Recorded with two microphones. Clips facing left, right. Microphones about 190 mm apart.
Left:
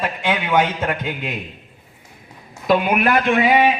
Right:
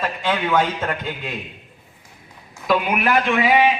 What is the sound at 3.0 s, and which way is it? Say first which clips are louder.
Speech: left 2 dB; 45° left (ahead or behind).